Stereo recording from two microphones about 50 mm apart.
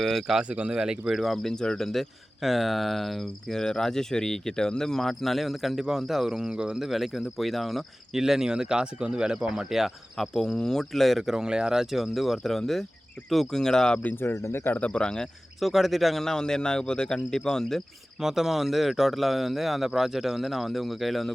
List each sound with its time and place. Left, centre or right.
0.0 s speech: centre
0.4 s speech: right
1.2 s speech: centre
3.6 s speech: centre
8.2 s speech: centre
10.2 s speech: centre
14.0 s speech: left
14.3 s speech: left
14.7 s speech: left
15.6 s speech: centre
18.2 s speech: centre